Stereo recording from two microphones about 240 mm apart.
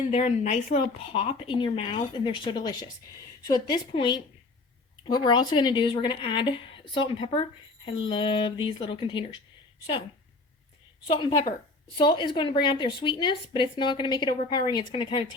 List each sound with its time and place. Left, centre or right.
0.1 s a woman's voice: left
11.0 s a woman's voice: left